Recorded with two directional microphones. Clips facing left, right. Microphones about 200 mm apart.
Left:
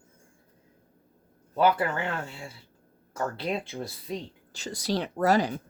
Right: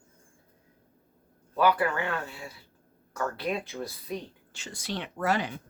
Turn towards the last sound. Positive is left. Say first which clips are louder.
# left 5 dB
turn(degrees=40)  # may be behind; listen again after turning